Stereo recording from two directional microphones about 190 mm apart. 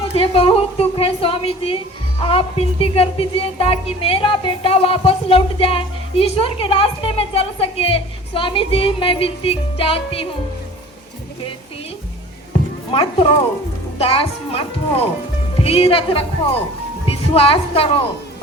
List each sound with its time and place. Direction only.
0.1 s a woman's voice: 30° left (ahead or behind)
12.9 s a woman's voice: 30° left (ahead or behind)
17.3 s speech: 30° left (ahead or behind)